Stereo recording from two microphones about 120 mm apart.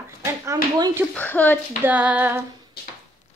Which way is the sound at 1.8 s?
10° right (ahead or behind).